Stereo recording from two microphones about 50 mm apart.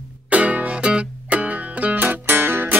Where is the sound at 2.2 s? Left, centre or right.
Right.